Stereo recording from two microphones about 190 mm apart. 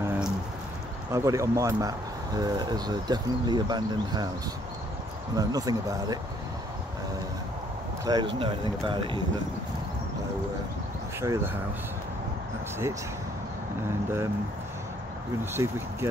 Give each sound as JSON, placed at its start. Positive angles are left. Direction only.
{"t": 0.0, "sound": "a sound", "side_deg": -10}
{"t": 1.1, "sound": "speech", "side_deg": -15}
{"t": 5.3, "sound": "speech", "side_deg": -20}
{"t": 8.0, "sound": "speech", "side_deg": -20}
{"t": 11.1, "sound": "speech", "side_deg": -15}
{"t": 15.5, "sound": "speech", "side_deg": -15}